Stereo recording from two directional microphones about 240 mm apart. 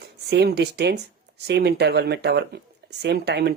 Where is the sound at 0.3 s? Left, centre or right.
Right.